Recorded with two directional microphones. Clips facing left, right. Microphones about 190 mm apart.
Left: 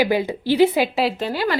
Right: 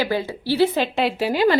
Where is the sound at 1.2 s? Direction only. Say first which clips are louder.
Right 3 dB; 10° right (ahead or behind).